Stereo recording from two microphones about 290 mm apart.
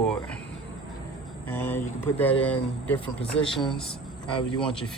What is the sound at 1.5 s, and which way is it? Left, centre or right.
Speech, centre.